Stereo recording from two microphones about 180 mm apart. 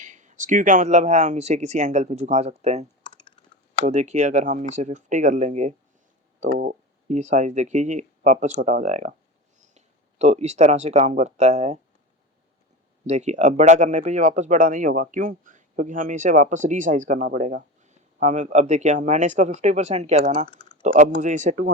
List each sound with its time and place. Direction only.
0.0 s speech: 45° right (ahead or behind)
3.1 s typing: 25° left (ahead or behind)
3.5 s speech: 40° right (ahead or behind)
13.1 s speech: 40° right (ahead or behind)
20.5 s typing: 25° left (ahead or behind)
20.8 s speech: 45° right (ahead or behind)